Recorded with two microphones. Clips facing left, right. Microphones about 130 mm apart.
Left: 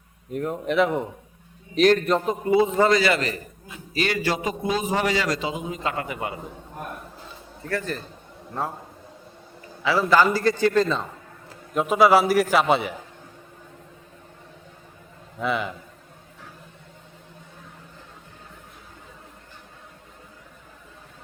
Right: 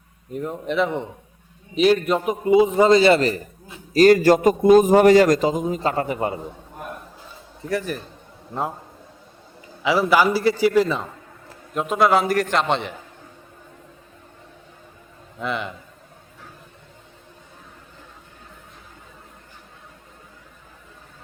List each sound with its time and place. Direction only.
0.3 s a man's voice: centre (ahead or behind); by 6.4 s 35° right (ahead or behind)
7.7 s a man's voice: 15° right (ahead or behind)
9.8 s a man's voice: 15° right (ahead or behind)
11.7 s a man's voice: centre (ahead or behind)
15.4 s a man's voice: centre (ahead or behind)